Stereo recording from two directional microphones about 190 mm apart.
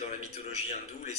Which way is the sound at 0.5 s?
35° left (ahead or behind).